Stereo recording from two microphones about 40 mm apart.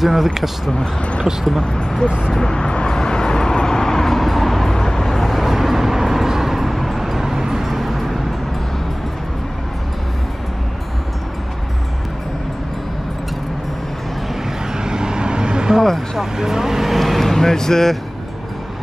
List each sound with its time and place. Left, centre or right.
0.0 s speech: centre
1.6 s speech: left
2.4 s vehicle: left; by 8.2 s centre
14.7 s vehicle: centre